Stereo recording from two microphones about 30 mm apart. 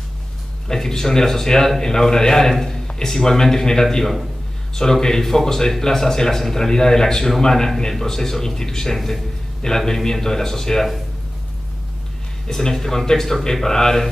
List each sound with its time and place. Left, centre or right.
0.8 s a man's voice: centre
4.0 s a man's voice: centre
4.8 s a man's voice: centre
12.4 s a man's voice: centre